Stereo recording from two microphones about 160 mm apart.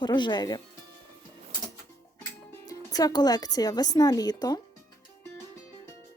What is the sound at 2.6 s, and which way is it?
Speech, 25° left (ahead or behind).